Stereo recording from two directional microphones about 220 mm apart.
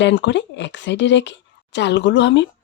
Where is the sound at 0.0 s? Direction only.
55° left (ahead or behind).